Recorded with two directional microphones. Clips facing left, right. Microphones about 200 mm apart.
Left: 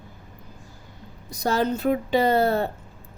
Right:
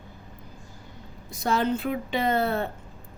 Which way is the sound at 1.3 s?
40° left (ahead or behind).